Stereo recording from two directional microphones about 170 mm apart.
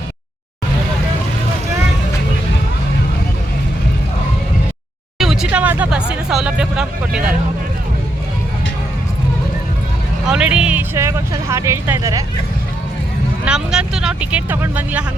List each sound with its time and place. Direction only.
5.2 s speech: 5° right (ahead or behind)
10.2 s speech: 5° right (ahead or behind)
13.4 s speech: 5° right (ahead or behind)